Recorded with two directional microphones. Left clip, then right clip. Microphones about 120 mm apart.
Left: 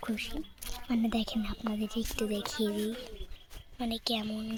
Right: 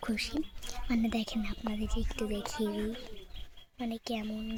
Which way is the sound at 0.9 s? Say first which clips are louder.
Left 1 dB; 5° right (ahead or behind).